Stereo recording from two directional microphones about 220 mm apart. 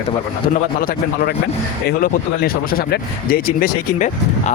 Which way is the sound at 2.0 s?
45° left (ahead or behind).